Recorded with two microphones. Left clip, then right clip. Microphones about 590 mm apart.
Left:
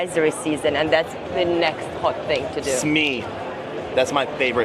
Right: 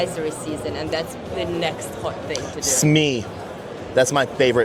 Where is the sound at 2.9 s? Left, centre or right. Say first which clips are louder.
Right 1 dB; right.